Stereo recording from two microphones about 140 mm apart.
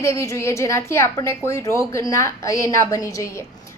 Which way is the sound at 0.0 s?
20° left (ahead or behind).